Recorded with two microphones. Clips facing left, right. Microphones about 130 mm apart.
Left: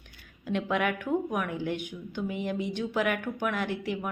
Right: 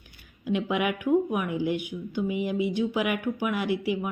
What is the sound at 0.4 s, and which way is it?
Speech, 10° right (ahead or behind).